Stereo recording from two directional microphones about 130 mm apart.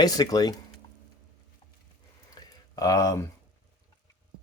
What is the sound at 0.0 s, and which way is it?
Speech, 30° left (ahead or behind).